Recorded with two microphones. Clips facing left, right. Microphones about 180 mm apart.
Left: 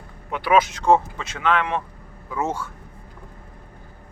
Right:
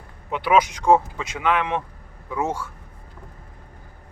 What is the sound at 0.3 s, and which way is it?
Speech, 20° right (ahead or behind).